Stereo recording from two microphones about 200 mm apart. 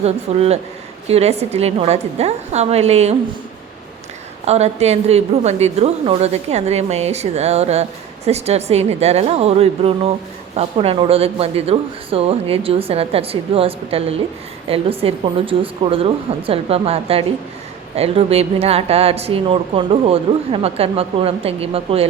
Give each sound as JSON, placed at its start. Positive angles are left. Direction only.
{"t": 0.0, "sound": "a woman's voice", "side_deg": -30}
{"t": 4.4, "sound": "a woman's voice", "side_deg": -35}